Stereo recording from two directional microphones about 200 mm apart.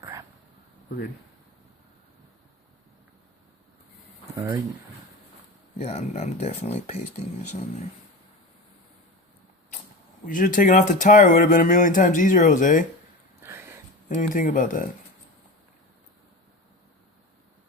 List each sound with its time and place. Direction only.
0.0 s a sound: 15° right (ahead or behind)
4.4 s speech: 15° right (ahead or behind)
5.8 s speech: 35° left (ahead or behind)
10.2 s speech: 40° left (ahead or behind)
13.4 s a sound: 10° right (ahead or behind)
14.1 s speech: 40° left (ahead or behind)